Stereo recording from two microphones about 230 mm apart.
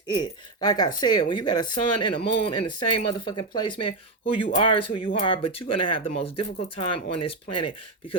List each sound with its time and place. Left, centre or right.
0.1 s speech: centre